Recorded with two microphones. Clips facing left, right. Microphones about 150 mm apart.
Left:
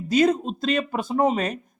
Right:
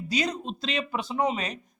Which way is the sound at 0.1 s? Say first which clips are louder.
Left 10 dB; 50° left (ahead or behind).